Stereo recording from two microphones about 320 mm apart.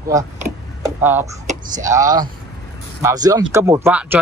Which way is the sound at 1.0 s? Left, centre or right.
Centre.